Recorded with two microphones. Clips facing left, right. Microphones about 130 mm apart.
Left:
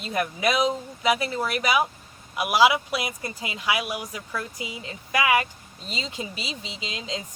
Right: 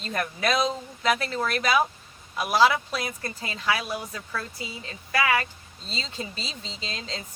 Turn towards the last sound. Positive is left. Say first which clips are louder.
# left 3 dB
turn(degrees=15)  # may be behind; listen again after turning